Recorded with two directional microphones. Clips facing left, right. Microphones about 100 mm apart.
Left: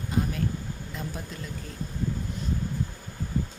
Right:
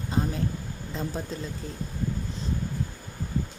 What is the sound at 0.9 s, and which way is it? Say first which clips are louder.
Speech: right 6 dB; 30° right (ahead or behind).